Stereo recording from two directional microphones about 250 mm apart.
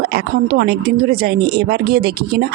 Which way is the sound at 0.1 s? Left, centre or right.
Right.